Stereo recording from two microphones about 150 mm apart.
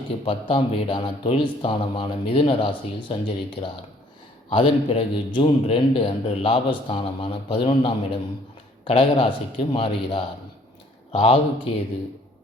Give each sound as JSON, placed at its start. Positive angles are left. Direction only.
{"t": 0.3, "sound": "a man's voice", "side_deg": 35}